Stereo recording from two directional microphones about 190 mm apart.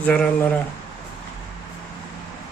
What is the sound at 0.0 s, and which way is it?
Speech, 5° left (ahead or behind).